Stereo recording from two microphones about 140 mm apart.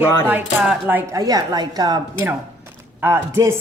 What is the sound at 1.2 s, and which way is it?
Speech, 25° right (ahead or behind).